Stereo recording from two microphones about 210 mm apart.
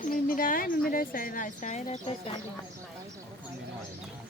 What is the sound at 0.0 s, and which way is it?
Speech, 40° left (ahead or behind).